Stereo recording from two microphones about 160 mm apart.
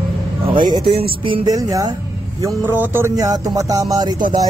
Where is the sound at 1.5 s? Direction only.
20° right (ahead or behind).